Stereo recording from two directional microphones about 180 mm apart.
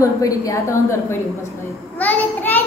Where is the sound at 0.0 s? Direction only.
15° left (ahead or behind).